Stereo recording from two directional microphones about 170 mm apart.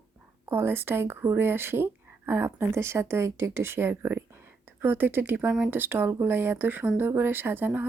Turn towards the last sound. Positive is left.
turn(degrees=-10)  # may be behind; listen again after turning